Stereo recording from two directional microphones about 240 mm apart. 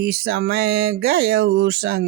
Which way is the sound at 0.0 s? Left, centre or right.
Right.